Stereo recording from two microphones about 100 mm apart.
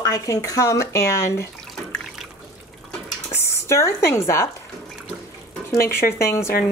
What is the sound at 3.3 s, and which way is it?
Speech, 25° left (ahead or behind).